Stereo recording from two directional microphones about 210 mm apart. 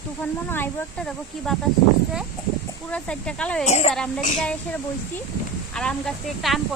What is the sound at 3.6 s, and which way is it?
Speech, 35° left (ahead or behind).